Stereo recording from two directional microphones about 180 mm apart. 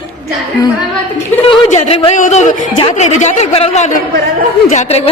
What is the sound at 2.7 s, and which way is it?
A woman's voice, 30° left (ahead or behind).